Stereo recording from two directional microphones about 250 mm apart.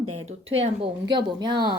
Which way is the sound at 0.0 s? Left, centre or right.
Right.